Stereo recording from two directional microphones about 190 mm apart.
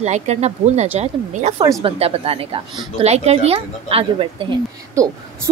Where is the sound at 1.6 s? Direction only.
20° right (ahead or behind).